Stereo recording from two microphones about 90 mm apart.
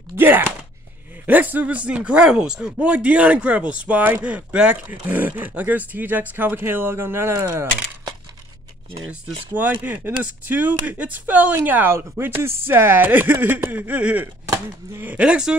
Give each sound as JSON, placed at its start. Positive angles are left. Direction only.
{"t": 0.1, "sound": "speech", "side_deg": -25}
{"t": 9.5, "sound": "speech", "side_deg": -20}